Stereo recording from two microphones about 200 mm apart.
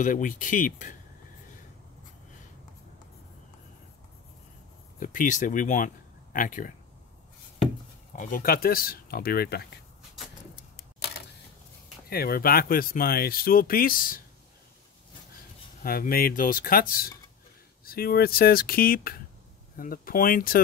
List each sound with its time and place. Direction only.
0.0 s speech: 40° left (ahead or behind)
5.0 s speech: 40° left (ahead or behind)
8.2 s speech: 45° left (ahead or behind)
12.1 s speech: 50° left (ahead or behind)
15.8 s speech: 45° left (ahead or behind)